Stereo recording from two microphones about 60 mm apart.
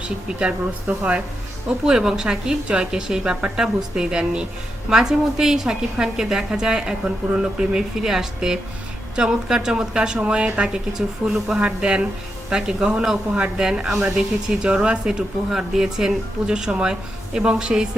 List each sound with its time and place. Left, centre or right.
0.0 s speech: centre